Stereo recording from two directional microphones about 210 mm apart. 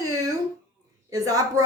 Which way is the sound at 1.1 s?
15° right (ahead or behind).